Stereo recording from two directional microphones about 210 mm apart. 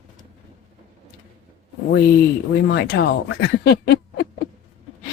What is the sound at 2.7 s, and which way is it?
Speech, 50° left (ahead or behind).